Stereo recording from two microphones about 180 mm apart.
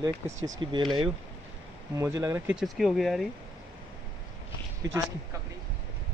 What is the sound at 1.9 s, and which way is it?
Speech, 15° right (ahead or behind).